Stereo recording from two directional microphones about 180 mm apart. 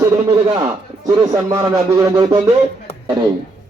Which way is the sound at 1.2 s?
15° right (ahead or behind).